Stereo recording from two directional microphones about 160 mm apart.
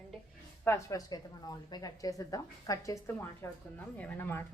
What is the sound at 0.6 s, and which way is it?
A woman's voice, 20° left (ahead or behind).